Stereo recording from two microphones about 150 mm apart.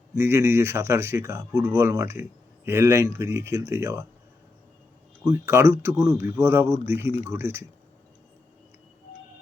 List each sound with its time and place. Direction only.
0.1 s speech: 20° right (ahead or behind)
5.2 s speech: 15° right (ahead or behind)